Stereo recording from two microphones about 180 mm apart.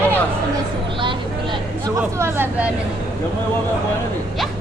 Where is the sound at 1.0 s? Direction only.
25° right (ahead or behind).